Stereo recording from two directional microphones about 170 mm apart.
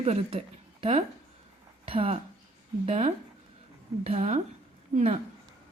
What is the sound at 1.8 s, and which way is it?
Speech, 35° right (ahead or behind).